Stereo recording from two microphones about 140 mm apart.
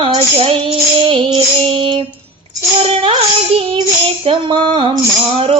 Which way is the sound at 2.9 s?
40° right (ahead or behind).